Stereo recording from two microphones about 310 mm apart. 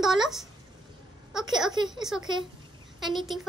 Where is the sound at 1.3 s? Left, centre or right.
Centre.